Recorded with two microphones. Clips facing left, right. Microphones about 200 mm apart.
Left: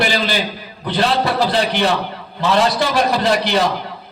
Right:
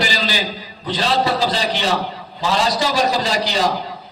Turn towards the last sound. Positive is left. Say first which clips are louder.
# left 3 dB
turn(degrees=60)  # may be behind; listen again after turning